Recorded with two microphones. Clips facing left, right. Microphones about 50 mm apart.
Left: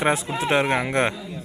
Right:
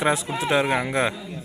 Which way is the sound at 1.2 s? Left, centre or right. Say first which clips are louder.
Left 1 dB; centre.